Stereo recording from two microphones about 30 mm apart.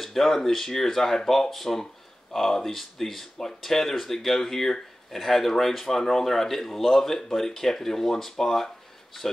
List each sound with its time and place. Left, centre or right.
0.0 s speech: centre